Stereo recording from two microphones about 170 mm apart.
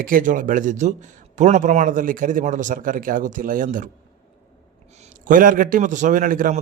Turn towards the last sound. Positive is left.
turn(degrees=-50)  # may be behind; listen again after turning